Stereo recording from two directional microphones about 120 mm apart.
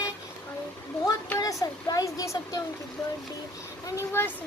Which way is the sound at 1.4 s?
30° left (ahead or behind).